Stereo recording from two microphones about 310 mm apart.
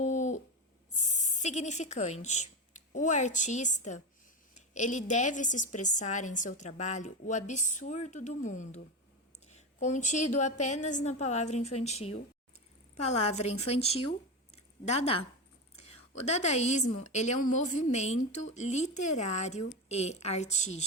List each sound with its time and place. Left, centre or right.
0.0 s a sound: left
0.9 s a woman's voice: left
16.2 s a woman's voice: left